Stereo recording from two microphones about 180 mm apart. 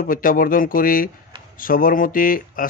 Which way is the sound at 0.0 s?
50° left (ahead or behind).